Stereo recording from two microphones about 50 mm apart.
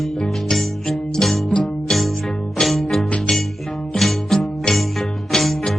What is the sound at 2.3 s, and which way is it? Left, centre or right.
Music, centre.